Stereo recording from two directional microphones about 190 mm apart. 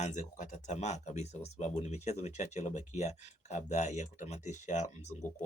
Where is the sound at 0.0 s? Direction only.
40° left (ahead or behind).